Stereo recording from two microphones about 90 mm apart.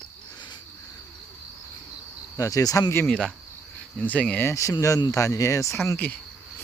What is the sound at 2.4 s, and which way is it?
Speech, 40° left (ahead or behind).